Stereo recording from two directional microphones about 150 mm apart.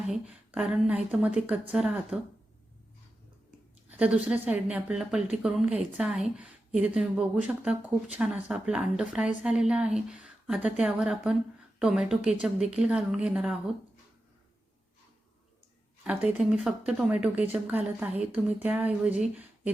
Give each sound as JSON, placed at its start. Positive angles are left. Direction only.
{"t": 0.1, "sound": "a woman's voice", "side_deg": -5}
{"t": 3.8, "sound": "a woman's voice", "side_deg": -10}
{"t": 16.0, "sound": "a woman's voice", "side_deg": -10}